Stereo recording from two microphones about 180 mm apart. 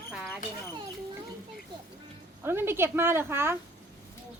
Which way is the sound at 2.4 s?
15° right (ahead or behind).